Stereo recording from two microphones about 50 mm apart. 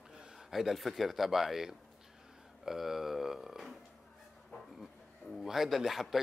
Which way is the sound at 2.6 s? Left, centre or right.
Centre.